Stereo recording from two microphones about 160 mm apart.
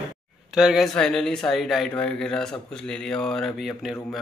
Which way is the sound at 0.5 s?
Centre (ahead or behind).